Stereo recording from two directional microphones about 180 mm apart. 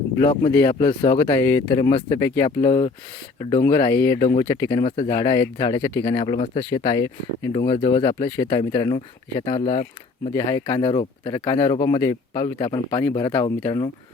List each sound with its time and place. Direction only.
0.2 s speech: 20° left (ahead or behind)
4.9 s speech: 30° left (ahead or behind)